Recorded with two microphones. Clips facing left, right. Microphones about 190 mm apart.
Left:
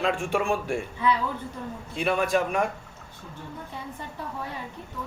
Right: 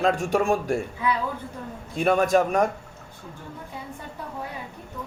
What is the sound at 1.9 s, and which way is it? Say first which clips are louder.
Speech: right 5 dB; 45° right (ahead or behind).